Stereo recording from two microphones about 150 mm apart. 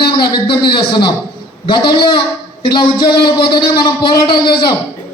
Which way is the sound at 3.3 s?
30° left (ahead or behind).